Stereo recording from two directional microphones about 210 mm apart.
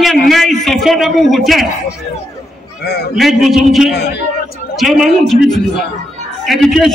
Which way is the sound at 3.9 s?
50° left (ahead or behind).